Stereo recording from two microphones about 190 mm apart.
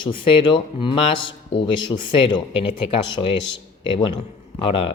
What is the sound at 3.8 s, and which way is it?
Speech, 25° left (ahead or behind).